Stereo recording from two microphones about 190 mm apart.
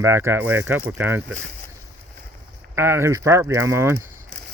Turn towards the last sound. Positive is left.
turn(degrees=-15)  # may be behind; listen again after turning